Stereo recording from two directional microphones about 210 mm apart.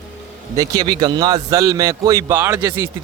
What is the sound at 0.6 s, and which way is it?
Speech, 20° right (ahead or behind).